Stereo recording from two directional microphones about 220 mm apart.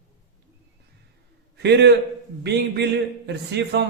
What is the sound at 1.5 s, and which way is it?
A man's voice, 50° right (ahead or behind).